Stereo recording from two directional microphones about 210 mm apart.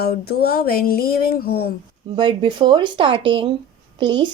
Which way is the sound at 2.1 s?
25° right (ahead or behind).